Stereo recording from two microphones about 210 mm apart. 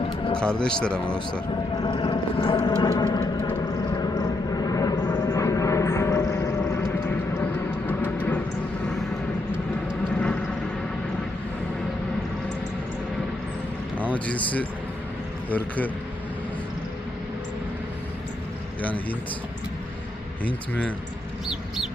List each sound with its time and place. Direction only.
0.3 s speech: 5° left (ahead or behind)
1.8 s a sound: 20° left (ahead or behind)
3.9 s vehicle: 15° left (ahead or behind)
7.3 s train: 10° left (ahead or behind)
14.3 s speech: 5° left (ahead or behind)
18.8 s speech: 5° left (ahead or behind)
20.4 s speech: 5° left (ahead or behind)